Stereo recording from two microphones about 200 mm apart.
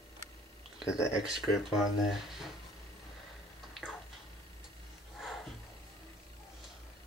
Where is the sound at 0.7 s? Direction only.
15° left (ahead or behind).